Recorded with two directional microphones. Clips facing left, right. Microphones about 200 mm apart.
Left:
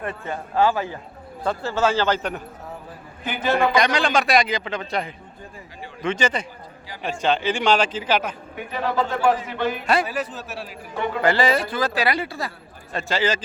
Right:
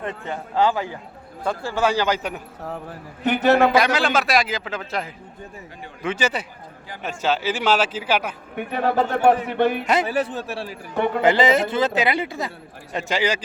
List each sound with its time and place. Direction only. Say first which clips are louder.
0.0 s speech: even; 20° right (ahead or behind)
3.2 s a man's voice: right 5 dB; 70° right (ahead or behind)
3.8 s a man's voice: right 1 dB; 5° right (ahead or behind)
9.0 s a man's voice: right 3 dB; 60° right (ahead or behind)
9.8 s a man's voice: right 2 dB; 20° right (ahead or behind)